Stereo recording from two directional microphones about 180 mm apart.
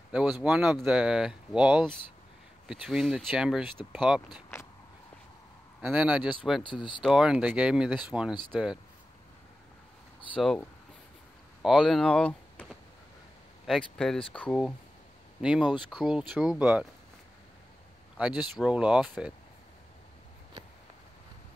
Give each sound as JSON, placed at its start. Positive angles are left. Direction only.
{"t": 0.1, "sound": "speech", "side_deg": -5}
{"t": 5.8, "sound": "speech", "side_deg": -5}
{"t": 6.6, "sound": "speech", "side_deg": 25}
{"t": 7.0, "sound": "speech", "side_deg": -5}
{"t": 11.6, "sound": "speech", "side_deg": 0}
{"t": 18.1, "sound": "speech", "side_deg": -5}